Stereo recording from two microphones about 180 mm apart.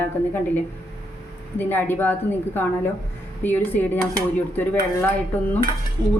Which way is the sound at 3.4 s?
10° left (ahead or behind).